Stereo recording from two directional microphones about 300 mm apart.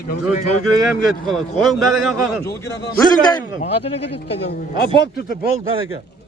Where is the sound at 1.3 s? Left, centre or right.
Centre.